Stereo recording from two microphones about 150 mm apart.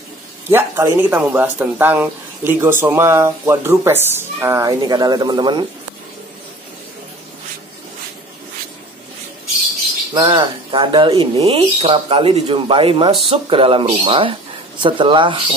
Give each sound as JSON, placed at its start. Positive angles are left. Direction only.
{"t": 0.5, "sound": "speech", "side_deg": -15}
{"t": 10.1, "sound": "speech", "side_deg": -30}